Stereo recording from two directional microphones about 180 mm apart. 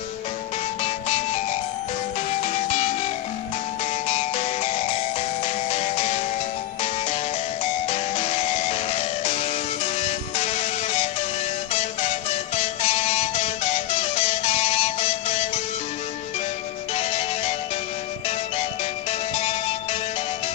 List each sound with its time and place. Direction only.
0.8 s music: 40° left (ahead or behind)
2.4 s music: 40° left (ahead or behind)
4.1 s music: 35° left (ahead or behind)
7.8 s music: 35° left (ahead or behind)
16.9 s music: 35° left (ahead or behind)
18.6 s music: 35° left (ahead or behind)